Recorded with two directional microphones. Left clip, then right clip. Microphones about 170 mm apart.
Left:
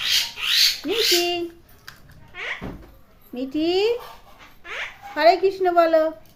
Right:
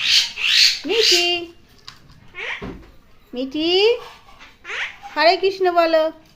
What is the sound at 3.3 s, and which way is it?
Speech, 5° left (ahead or behind).